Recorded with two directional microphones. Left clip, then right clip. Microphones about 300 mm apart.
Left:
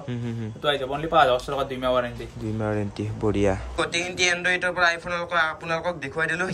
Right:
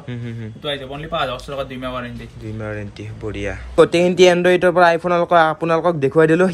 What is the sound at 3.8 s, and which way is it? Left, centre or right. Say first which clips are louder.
Speech: right 17 dB; centre.